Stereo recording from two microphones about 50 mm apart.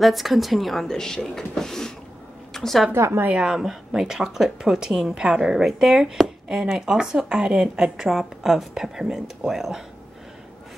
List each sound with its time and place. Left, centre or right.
0.0 s speech: centre
2.5 s a sound: centre
2.9 s a woman's voice: right
3.3 s speech: centre